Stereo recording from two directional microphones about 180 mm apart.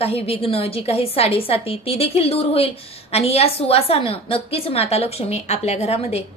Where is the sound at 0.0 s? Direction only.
35° left (ahead or behind).